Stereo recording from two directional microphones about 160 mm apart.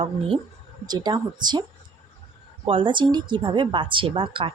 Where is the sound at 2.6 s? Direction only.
30° right (ahead or behind).